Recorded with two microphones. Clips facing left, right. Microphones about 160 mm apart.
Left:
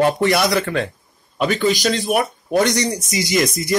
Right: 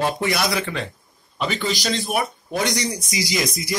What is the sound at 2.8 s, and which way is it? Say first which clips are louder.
Speech: left 4 dB; 45° left (ahead or behind).